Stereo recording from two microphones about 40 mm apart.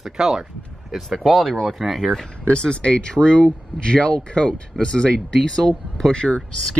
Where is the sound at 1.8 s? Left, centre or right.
Centre.